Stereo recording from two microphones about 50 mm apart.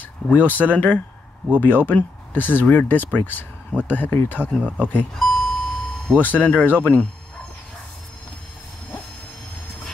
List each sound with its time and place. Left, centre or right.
0.0 s speech: left
4.6 s speech: right
5.1 s a sound: centre
6.1 s speech: left